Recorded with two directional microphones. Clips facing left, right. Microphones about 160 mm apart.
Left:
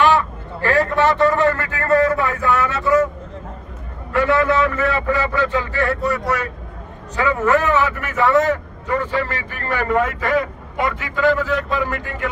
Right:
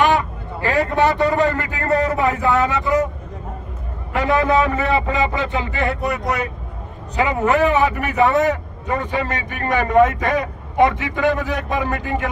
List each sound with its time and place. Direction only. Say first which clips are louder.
0.0 s a man's voice: left 1 dB; 15° right (ahead or behind)
4.2 s a man's voice: even; 15° right (ahead or behind)